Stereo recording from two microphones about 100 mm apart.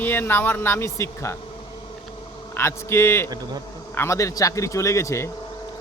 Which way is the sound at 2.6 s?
25° left (ahead or behind).